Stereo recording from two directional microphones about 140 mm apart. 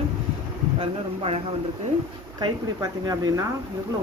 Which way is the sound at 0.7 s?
45° right (ahead or behind).